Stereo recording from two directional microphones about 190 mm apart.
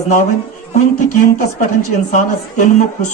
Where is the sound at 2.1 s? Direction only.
40° left (ahead or behind).